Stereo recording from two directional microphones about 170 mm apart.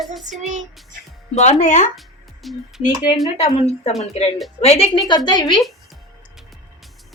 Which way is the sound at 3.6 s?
35° left (ahead or behind).